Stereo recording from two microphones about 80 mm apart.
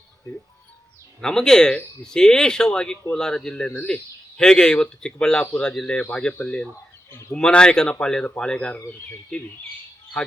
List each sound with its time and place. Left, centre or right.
1.2 s speech: centre
7.1 s speech: left
7.3 s speech: centre